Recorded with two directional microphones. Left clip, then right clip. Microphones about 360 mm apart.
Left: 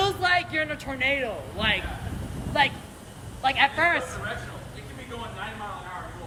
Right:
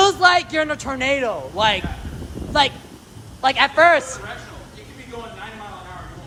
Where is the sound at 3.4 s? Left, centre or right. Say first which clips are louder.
Right 7 dB; centre.